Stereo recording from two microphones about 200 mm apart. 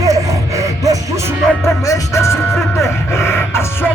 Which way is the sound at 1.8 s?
15° left (ahead or behind).